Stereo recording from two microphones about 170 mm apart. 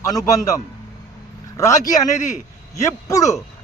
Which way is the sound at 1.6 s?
20° left (ahead or behind).